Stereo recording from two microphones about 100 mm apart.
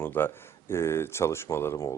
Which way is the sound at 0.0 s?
20° left (ahead or behind).